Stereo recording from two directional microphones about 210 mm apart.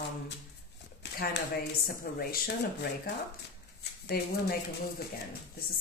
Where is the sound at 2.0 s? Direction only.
45° left (ahead or behind).